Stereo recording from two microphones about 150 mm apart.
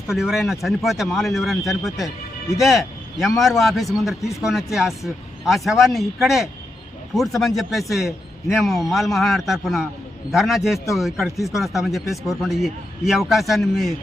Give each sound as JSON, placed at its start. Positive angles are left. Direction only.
{"t": 0.1, "sound": "a man's voice", "side_deg": 0}